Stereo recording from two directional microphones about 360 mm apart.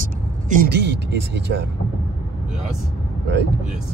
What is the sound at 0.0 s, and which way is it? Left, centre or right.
Vehicle, right.